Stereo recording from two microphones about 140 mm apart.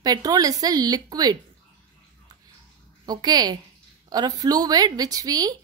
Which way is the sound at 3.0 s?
30° right (ahead or behind).